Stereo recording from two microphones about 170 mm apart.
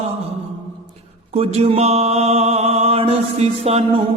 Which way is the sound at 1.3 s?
35° right (ahead or behind).